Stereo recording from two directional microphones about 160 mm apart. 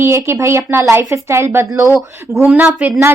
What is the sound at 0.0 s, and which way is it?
A woman's voice, 15° right (ahead or behind).